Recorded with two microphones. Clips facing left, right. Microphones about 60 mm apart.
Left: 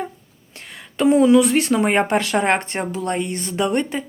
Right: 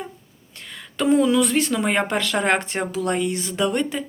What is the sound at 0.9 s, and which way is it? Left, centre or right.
Speech, centre.